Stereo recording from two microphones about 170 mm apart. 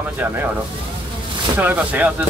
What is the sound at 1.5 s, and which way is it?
Speech, 10° right (ahead or behind).